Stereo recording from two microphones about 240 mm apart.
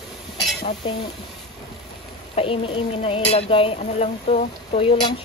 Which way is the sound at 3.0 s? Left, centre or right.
Left.